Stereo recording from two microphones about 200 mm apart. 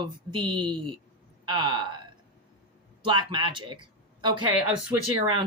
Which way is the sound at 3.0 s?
25° right (ahead or behind).